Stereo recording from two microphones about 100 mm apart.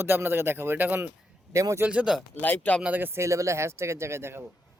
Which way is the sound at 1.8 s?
10° right (ahead or behind).